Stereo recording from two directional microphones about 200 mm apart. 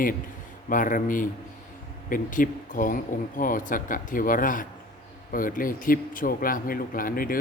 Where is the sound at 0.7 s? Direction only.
40° left (ahead or behind).